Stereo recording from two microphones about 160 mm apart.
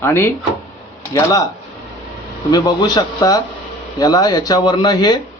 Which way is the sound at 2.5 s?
25° left (ahead or behind).